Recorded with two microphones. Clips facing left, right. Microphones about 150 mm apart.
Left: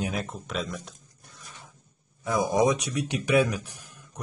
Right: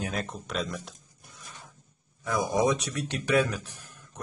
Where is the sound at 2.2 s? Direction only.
15° left (ahead or behind).